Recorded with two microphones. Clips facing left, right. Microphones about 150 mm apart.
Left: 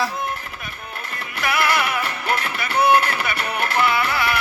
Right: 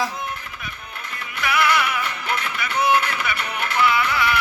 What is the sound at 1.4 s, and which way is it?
Music, 45° left (ahead or behind).